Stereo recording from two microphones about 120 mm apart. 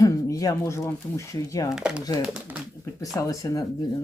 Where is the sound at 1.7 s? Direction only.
5° right (ahead or behind).